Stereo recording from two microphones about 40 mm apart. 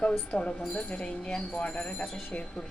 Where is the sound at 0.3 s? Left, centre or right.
Left.